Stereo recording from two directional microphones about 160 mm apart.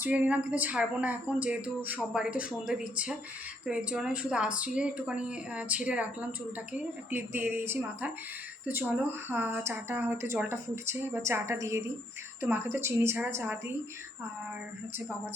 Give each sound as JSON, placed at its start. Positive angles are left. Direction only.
{"t": 0.0, "sound": "speech", "side_deg": -10}
{"t": 9.3, "sound": "speech", "side_deg": -10}